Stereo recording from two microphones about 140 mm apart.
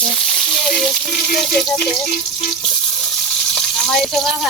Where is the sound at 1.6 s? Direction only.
5° left (ahead or behind).